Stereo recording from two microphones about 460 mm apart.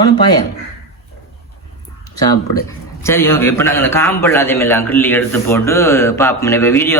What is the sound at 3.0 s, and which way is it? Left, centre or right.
Speech, centre.